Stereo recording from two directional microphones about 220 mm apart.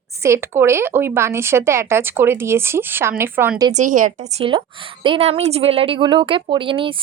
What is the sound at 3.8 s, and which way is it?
A woman's voice, 35° right (ahead or behind).